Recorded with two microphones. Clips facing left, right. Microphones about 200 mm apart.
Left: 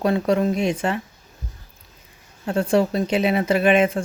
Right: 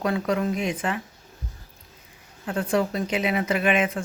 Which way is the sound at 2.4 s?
25° left (ahead or behind).